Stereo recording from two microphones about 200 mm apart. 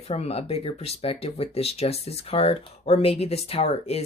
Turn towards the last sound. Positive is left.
turn(degrees=30)  # may be behind; listen again after turning